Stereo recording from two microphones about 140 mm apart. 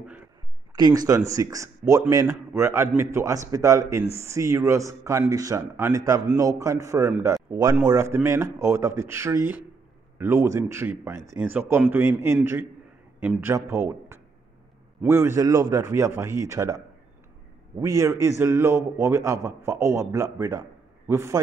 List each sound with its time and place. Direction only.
0.7 s a man's voice: 30° right (ahead or behind)